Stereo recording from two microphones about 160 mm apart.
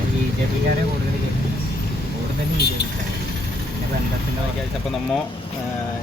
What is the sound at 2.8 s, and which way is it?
Speech, 90° left.